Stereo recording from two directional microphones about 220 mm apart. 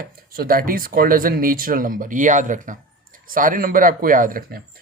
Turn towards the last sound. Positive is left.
turn(degrees=-45)  # may be behind; listen again after turning